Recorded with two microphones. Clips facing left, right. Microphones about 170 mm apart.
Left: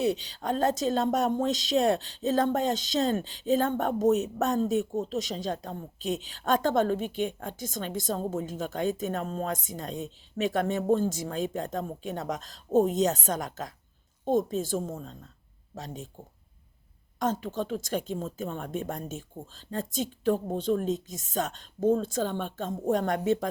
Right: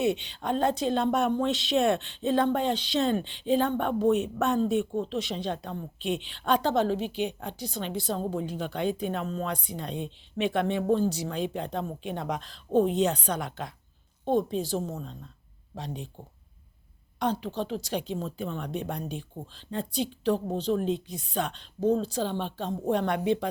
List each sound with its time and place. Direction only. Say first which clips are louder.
0.0 s speech: right 1 dB; 35° left (ahead or behind)
17.4 s speech: even; 45° left (ahead or behind)